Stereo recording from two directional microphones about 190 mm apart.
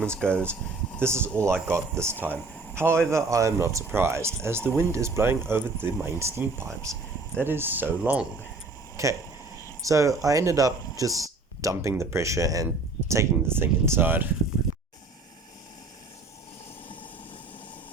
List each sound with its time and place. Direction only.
0.0 s speech: 5° left (ahead or behind)
1.0 s a man's voice: 15° right (ahead or behind)